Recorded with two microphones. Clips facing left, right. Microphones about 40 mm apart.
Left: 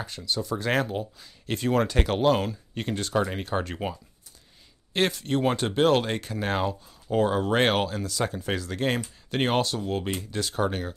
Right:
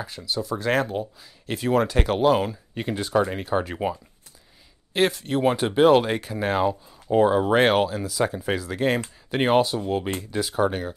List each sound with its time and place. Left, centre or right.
0.0 s speech: centre
4.9 s speech: centre